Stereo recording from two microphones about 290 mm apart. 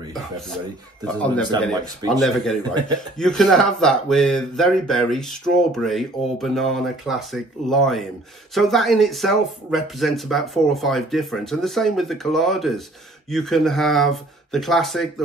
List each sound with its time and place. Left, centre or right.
1.0 s speech: centre